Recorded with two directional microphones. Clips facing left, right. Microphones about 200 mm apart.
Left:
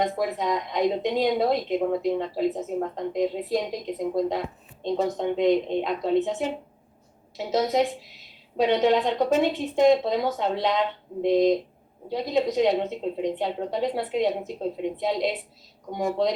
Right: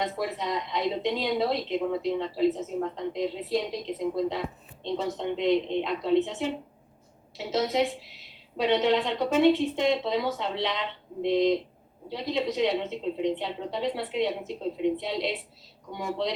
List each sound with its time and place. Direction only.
0.0 s a woman's voice: 50° left (ahead or behind)